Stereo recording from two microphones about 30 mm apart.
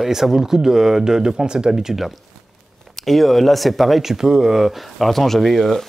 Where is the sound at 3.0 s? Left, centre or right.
Centre.